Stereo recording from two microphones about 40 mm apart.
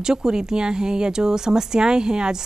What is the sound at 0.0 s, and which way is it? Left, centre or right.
Speech, centre.